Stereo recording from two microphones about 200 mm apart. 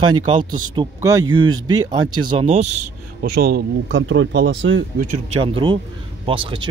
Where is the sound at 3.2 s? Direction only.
50° right (ahead or behind); by 4.8 s 65° right (ahead or behind).